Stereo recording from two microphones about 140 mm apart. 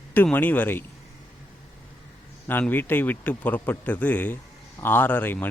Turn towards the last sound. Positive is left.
turn(degrees=15)  # may be behind; listen again after turning